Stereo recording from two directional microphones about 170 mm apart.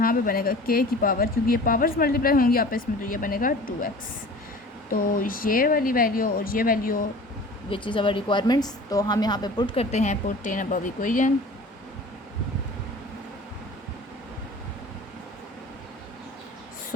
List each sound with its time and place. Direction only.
0.0 s speech: 60° left (ahead or behind)
4.9 s speech: 55° left (ahead or behind)
7.7 s a woman's voice: 30° left (ahead or behind)
9.9 s speech: 45° left (ahead or behind)